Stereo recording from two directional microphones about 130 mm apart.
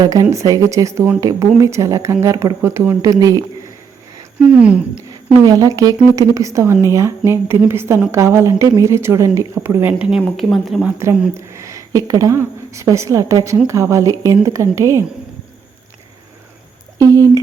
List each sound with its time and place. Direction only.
0.0 s speech: 25° right (ahead or behind)
4.4 s speech: 10° right (ahead or behind)
5.5 s speech: 25° right (ahead or behind); by 10.8 s centre (ahead or behind)
10.8 s a woman's voice: 15° right (ahead or behind)
17.0 s speech: 25° right (ahead or behind)